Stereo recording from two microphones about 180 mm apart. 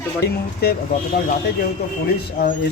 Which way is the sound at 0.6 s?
60° left (ahead or behind).